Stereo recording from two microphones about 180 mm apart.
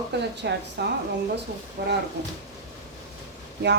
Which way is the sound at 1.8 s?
70° right (ahead or behind).